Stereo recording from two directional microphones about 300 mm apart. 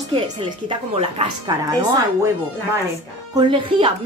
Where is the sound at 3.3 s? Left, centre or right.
Centre.